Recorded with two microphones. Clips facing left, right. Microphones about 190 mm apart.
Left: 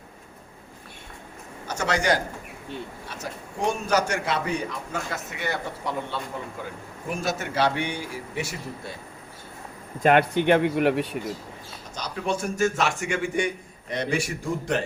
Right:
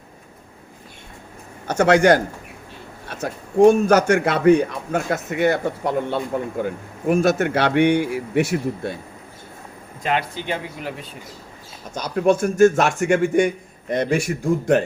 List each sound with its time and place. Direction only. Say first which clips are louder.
1.6 s a man's voice: right 10 dB; 55° right (ahead or behind)
10.0 s speech: left 5 dB; 55° left (ahead or behind)
11.9 s a man's voice: right 10 dB; 50° right (ahead or behind)